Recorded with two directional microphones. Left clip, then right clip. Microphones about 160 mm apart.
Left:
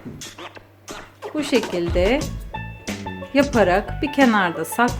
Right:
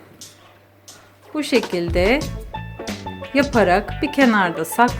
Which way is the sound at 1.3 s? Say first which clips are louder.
Right 1 dB; 20° right (ahead or behind).